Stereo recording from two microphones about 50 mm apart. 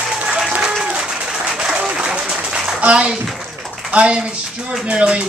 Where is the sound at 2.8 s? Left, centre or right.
Right.